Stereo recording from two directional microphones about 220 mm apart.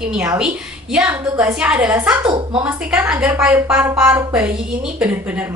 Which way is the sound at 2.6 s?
5° right (ahead or behind).